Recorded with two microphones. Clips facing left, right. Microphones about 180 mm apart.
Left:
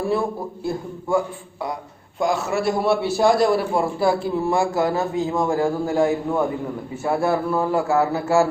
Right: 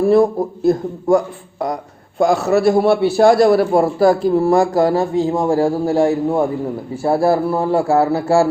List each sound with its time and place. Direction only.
0.1 s speech: 40° right (ahead or behind)
2.1 s a man's voice: 70° right (ahead or behind)
2.5 s speech: 40° right (ahead or behind)
2.8 s a man's voice: 65° right (ahead or behind)
3.6 s speech: 40° right (ahead or behind)